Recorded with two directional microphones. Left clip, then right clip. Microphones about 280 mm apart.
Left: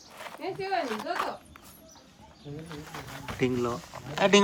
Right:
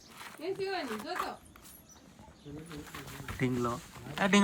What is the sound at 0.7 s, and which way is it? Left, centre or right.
Speech, left.